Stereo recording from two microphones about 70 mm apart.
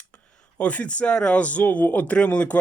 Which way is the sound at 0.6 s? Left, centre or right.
Centre.